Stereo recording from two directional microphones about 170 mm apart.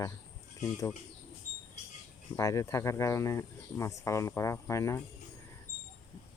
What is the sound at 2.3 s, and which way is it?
Speech, 20° left (ahead or behind).